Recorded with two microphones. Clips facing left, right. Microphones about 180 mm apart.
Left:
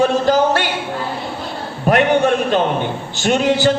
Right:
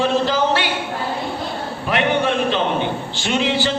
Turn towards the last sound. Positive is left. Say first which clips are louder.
# left 5 dB
turn(degrees=45)  # may be behind; listen again after turning